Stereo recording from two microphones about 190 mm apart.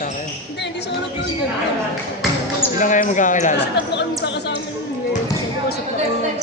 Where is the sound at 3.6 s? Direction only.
65° left (ahead or behind).